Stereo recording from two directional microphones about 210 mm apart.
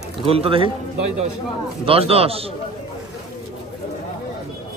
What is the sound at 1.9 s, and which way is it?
Speech, 30° right (ahead or behind).